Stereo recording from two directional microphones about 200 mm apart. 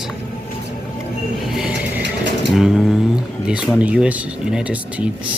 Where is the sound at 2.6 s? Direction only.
Centre (ahead or behind).